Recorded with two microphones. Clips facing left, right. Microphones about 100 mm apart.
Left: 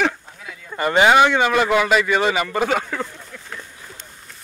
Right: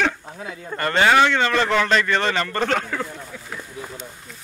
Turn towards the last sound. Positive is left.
turn(degrees=0)  # may be behind; listen again after turning